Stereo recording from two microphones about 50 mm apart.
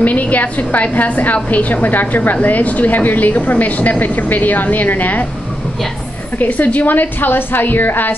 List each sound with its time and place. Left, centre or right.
0.0 s a woman's voice: left
6.4 s a woman's voice: left